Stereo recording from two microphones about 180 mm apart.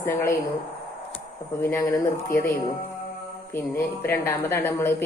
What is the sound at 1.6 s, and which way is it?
Speech, 15° left (ahead or behind).